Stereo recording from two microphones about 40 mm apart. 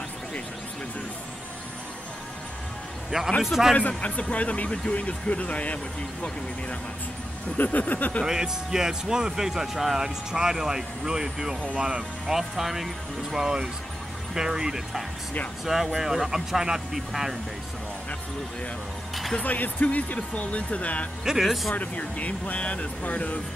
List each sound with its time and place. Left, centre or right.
3.4 s speech: centre
3.7 s speech: left
7.5 s speech: left
8.3 s speech: centre
19.4 s speech: left
21.2 s speech: centre
21.7 s speech: left